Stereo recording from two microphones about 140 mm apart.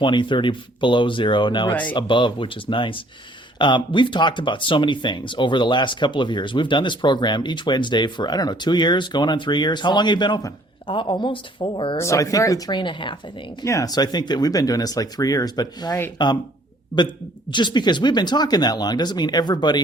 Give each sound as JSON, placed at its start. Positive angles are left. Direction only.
{"t": 0.0, "sound": "speech", "side_deg": 35}
{"t": 11.9, "sound": "speech", "side_deg": 20}
{"t": 13.6, "sound": "speech", "side_deg": 25}
{"t": 17.5, "sound": "speech", "side_deg": 35}